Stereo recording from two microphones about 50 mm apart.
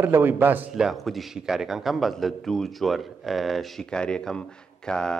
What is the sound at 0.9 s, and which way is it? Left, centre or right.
Speech, centre.